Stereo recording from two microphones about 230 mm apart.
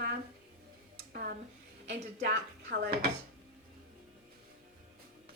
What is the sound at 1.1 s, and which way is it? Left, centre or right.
A woman's voice, right.